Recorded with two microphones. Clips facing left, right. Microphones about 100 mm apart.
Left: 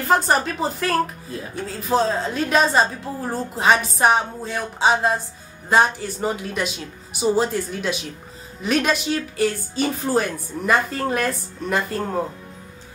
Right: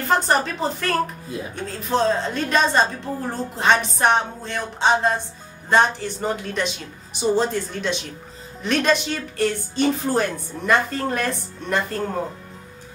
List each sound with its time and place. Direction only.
0.0 s a woman's voice: centre (ahead or behind)